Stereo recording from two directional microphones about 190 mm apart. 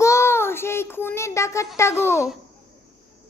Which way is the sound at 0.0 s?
15° left (ahead or behind).